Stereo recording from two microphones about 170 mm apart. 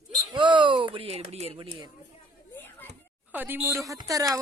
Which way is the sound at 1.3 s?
35° right (ahead or behind).